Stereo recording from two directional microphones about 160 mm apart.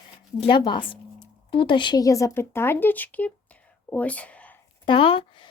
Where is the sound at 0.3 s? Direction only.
30° left (ahead or behind); by 4.5 s 10° left (ahead or behind).